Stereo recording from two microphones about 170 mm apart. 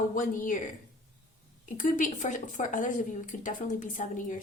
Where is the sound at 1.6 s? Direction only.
50° left (ahead or behind).